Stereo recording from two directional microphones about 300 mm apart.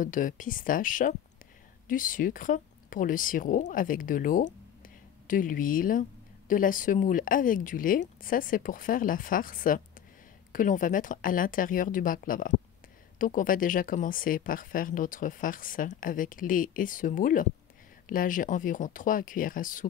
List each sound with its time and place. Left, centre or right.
0.0 s speech: left